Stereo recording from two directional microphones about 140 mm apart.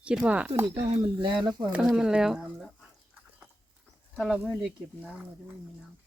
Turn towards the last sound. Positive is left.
turn(degrees=-5)  # may be behind; listen again after turning